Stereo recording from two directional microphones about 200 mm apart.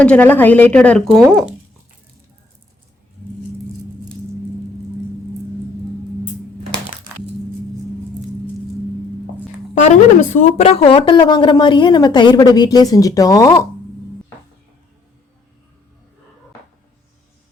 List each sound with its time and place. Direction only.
0.0 s a woman's voice: 5° left (ahead or behind)
9.7 s a woman's voice: 40° left (ahead or behind); by 13.7 s 15° left (ahead or behind)